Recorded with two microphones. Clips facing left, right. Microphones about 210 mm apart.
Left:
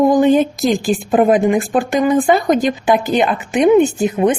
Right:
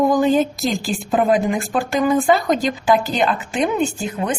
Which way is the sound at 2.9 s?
20° left (ahead or behind).